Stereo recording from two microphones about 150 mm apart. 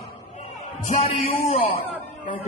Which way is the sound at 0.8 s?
50° left (ahead or behind).